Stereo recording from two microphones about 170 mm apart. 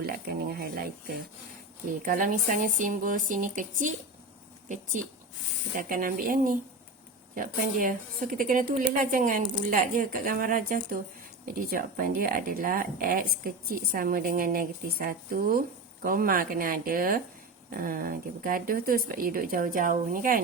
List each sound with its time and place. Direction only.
0.0 s speech: 65° right (ahead or behind)
1.9 s speech: 55° right (ahead or behind)
5.7 s speech: 55° right (ahead or behind)